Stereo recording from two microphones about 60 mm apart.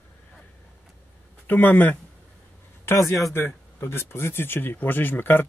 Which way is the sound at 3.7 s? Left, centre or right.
Left.